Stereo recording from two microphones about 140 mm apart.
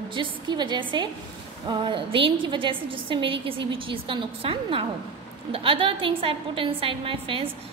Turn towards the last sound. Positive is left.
turn(degrees=-40)  # may be behind; listen again after turning